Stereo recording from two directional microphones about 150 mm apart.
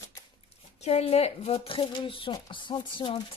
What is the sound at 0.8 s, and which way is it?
A woman's voice, 45° left (ahead or behind).